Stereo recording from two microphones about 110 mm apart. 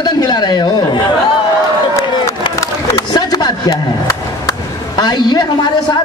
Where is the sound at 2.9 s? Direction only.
40° left (ahead or behind).